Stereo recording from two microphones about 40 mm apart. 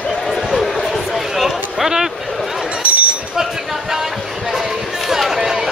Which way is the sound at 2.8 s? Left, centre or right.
Right.